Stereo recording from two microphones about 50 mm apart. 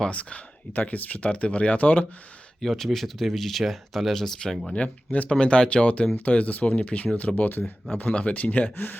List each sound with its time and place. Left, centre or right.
0.1 s speech: left
2.6 s speech: centre
4.7 s speech: left
8.7 s speech: left